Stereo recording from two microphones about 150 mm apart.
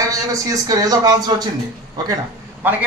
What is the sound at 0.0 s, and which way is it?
Speech, 20° right (ahead or behind).